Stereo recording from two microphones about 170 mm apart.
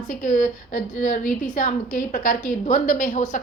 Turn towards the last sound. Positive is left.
turn(degrees=50)  # may be behind; listen again after turning